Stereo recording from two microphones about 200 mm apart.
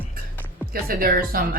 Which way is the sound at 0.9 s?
45° right (ahead or behind).